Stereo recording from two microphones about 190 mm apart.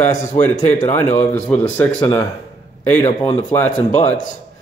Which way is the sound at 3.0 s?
30° left (ahead or behind).